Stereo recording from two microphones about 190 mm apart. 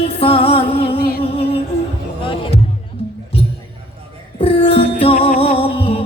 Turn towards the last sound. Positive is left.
turn(degrees=30)  # may be behind; listen again after turning